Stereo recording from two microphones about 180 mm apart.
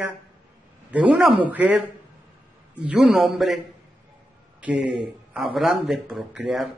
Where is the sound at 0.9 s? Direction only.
5° right (ahead or behind).